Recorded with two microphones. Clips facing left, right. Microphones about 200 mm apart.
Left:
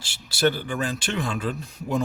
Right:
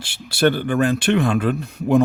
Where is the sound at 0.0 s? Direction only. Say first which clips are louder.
Right 5 dB; 60° right (ahead or behind).